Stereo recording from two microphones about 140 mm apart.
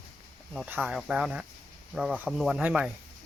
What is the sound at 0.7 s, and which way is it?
Speech, 10° right (ahead or behind).